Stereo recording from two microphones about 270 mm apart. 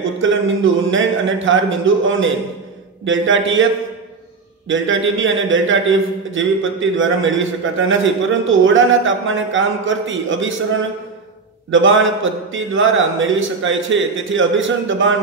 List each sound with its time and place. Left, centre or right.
0.2 s a man's voice: right
4.6 s a man's voice: right
11.7 s a man's voice: right